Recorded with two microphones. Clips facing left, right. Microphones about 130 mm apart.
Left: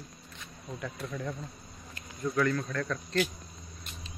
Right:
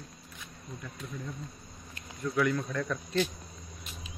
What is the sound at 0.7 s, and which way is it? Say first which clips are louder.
Speech: left 5 dB; 85° left.